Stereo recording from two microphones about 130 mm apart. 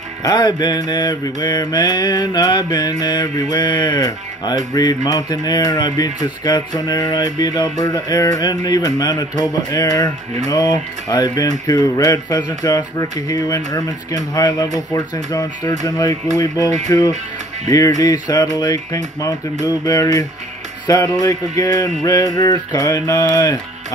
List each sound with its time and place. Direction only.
0.2 s mantra: 35° left (ahead or behind)
11.6 s speech: 30° left (ahead or behind)